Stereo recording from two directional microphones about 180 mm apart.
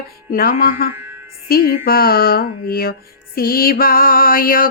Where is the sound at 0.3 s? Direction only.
55° left (ahead or behind).